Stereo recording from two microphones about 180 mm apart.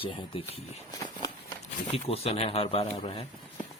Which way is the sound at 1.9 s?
35° left (ahead or behind).